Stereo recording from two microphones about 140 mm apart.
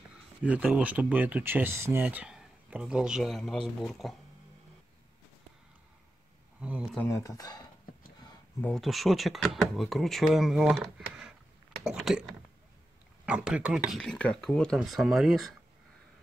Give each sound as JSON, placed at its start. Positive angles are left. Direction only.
{"t": 0.4, "sound": "speech", "side_deg": -10}
{"t": 6.6, "sound": "speech", "side_deg": -5}
{"t": 7.0, "sound": "speech", "side_deg": 20}
{"t": 8.5, "sound": "speech", "side_deg": 5}